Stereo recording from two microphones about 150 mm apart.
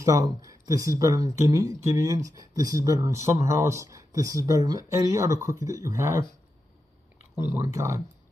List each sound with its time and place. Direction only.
0.0 s speech: 20° right (ahead or behind)
7.3 s speech: 20° right (ahead or behind)